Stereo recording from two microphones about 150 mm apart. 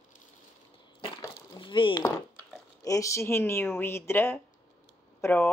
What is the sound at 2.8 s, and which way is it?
Speech, 20° left (ahead or behind).